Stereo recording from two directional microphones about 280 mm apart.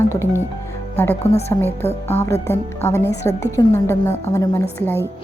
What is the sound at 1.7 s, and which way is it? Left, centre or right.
Speech, left.